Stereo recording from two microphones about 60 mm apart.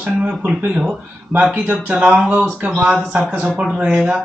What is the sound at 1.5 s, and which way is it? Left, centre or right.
Speech, right.